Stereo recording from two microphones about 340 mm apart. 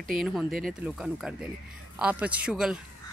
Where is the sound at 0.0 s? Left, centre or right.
Centre.